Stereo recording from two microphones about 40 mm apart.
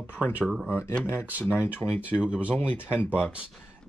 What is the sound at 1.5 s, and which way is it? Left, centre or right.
Speech, right.